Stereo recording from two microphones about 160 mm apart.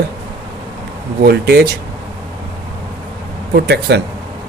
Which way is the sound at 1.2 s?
90° right.